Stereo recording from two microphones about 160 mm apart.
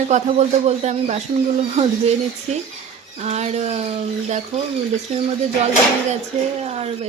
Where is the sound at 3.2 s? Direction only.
45° right (ahead or behind).